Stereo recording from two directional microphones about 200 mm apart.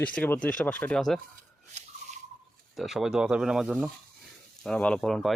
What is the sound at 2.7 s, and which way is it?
Speech, centre (ahead or behind).